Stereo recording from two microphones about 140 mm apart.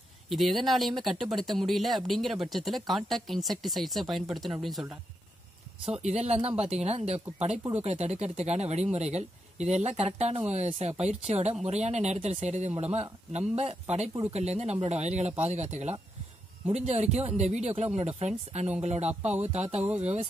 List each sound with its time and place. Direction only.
0.3 s speech: centre (ahead or behind)
5.9 s speech: 50° right (ahead or behind)
19.8 s speech: 10° right (ahead or behind)